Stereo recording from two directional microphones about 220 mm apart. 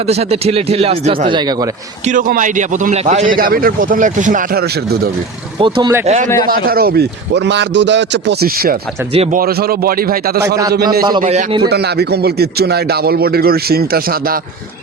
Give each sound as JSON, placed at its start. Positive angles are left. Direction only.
{"t": 0.1, "sound": "a man's voice", "side_deg": -30}
{"t": 2.0, "sound": "a man's voice", "side_deg": -35}
{"t": 5.5, "sound": "a man's voice", "side_deg": -20}
{"t": 6.1, "sound": "a man's voice", "side_deg": -35}
{"t": 9.1, "sound": "a man's voice", "side_deg": -25}
{"t": 9.4, "sound": "speech", "side_deg": -45}
{"t": 11.2, "sound": "a man's voice", "side_deg": -30}
{"t": 11.7, "sound": "speech", "side_deg": -50}